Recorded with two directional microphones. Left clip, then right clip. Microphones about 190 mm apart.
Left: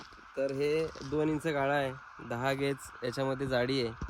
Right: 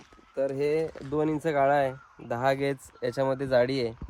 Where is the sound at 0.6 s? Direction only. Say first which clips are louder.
Right 4 dB; centre (ahead or behind).